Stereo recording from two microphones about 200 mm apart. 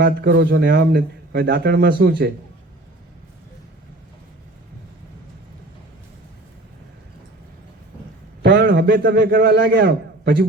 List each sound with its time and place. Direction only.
0.0 s speech: 50° right (ahead or behind)
8.4 s a man's voice: 55° right (ahead or behind)